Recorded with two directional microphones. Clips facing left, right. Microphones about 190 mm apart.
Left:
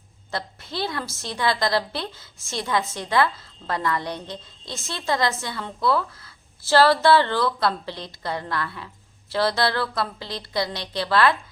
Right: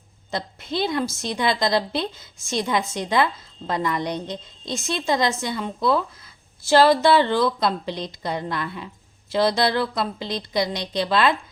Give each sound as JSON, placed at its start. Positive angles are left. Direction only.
{"t": 0.3, "sound": "a woman's voice", "side_deg": -20}